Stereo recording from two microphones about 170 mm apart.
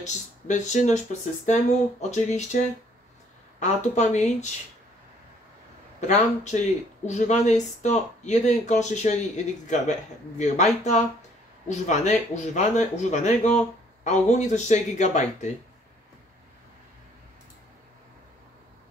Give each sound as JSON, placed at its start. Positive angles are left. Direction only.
{"t": 0.0, "sound": "speech", "side_deg": 45}
{"t": 5.9, "sound": "speech", "side_deg": 45}